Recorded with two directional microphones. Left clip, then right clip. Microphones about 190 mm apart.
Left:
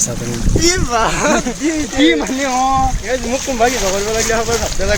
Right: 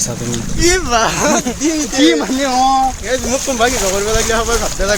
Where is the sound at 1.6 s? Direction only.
15° right (ahead or behind).